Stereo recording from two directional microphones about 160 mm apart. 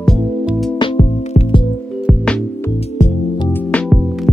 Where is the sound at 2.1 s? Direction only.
5° right (ahead or behind).